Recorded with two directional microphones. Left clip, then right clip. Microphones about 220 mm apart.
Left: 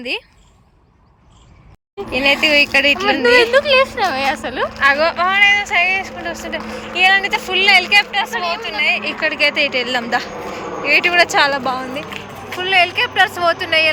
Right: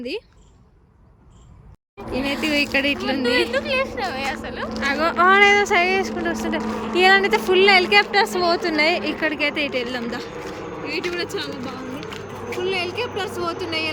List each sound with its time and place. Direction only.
2.1 s speech: 5° right (ahead or behind)
3.4 s speech: 25° left (ahead or behind)
4.8 s speech: 10° right (ahead or behind)